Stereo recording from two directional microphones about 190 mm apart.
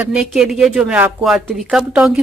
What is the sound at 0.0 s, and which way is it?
Speech, 5° right (ahead or behind).